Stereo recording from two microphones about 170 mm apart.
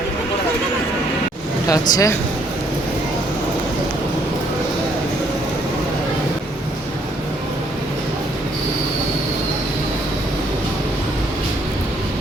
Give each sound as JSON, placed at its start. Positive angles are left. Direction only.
{"t": 1.6, "sound": "speech", "side_deg": 20}